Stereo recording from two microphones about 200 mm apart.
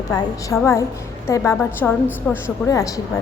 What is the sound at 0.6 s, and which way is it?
A woman's voice, 15° left (ahead or behind).